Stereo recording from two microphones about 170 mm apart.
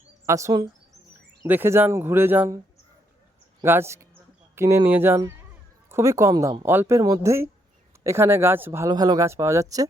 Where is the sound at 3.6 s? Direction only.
15° right (ahead or behind).